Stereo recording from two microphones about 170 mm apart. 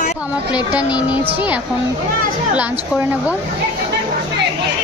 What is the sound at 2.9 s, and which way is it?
Speech, 5° right (ahead or behind).